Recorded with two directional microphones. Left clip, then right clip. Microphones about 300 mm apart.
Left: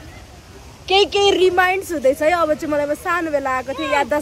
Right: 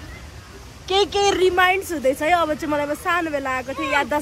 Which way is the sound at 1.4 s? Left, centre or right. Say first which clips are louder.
Left 2 dB; centre.